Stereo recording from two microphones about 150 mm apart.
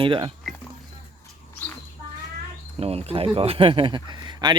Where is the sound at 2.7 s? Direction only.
45° right (ahead or behind).